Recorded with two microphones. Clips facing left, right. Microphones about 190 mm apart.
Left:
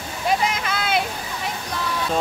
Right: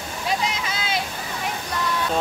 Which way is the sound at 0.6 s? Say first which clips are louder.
Left 4 dB; 60° left (ahead or behind).